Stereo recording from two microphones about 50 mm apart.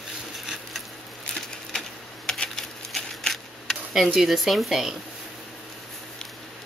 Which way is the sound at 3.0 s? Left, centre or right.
Centre.